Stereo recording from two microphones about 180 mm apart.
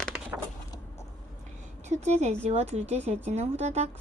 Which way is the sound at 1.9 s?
40° right (ahead or behind).